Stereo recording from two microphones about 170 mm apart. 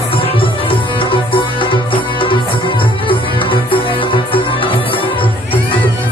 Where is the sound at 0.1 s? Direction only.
30° left (ahead or behind).